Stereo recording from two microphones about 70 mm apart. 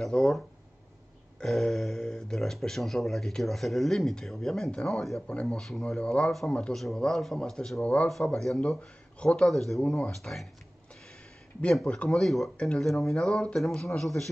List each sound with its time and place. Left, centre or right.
0.0 s speech: centre
1.4 s speech: centre
5.2 s a man's voice: centre
7.8 s a man's voice: centre
8.1 s a man's voice: centre
9.5 s speech: centre
9.8 s a man's voice: centre
10.1 s speech: centre
11.7 s a man's voice: centre